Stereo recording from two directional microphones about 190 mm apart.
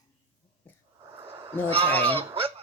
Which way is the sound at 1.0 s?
30° right (ahead or behind).